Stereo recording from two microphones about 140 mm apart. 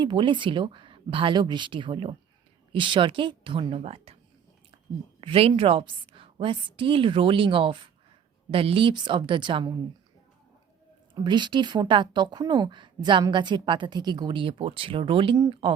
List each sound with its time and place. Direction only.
0.0 s speech: 35° right (ahead or behind)
5.2 s speech: 40° right (ahead or behind)
11.1 s speech: 35° right (ahead or behind)